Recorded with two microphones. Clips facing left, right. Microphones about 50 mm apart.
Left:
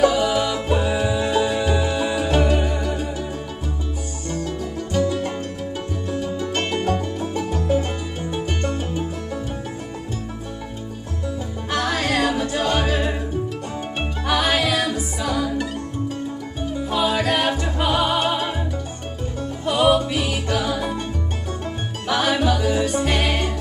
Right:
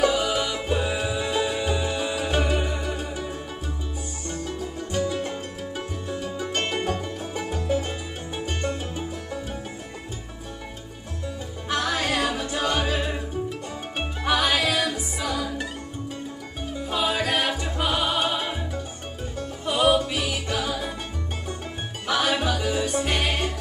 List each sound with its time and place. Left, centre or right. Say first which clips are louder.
0.0 s music: left 5 dB; centre
4.5 s music: left 4 dB; centre
6.2 s music: left 5 dB; centre
6.5 s music: left 4 dB; centre
11.7 s music: left 3 dB; left
13.9 s music: left 1 dB; centre
16.9 s music: left 4 dB; centre
19.6 s music: left 3 dB; centre
22.0 s music: left 4 dB; centre